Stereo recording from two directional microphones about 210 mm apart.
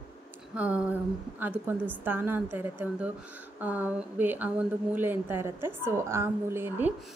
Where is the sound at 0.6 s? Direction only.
5° right (ahead or behind).